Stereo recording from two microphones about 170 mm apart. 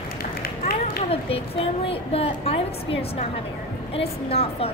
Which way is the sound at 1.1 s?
35° left (ahead or behind).